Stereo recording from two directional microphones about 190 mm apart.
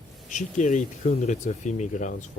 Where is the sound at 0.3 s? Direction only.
40° left (ahead or behind).